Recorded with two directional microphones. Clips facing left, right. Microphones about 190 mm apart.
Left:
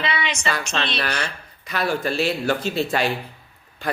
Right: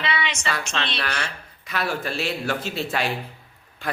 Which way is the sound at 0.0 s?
40° left (ahead or behind).